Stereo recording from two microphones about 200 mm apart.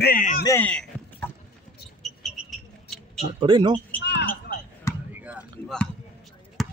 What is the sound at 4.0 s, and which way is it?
Basketball bounce, 60° left (ahead or behind).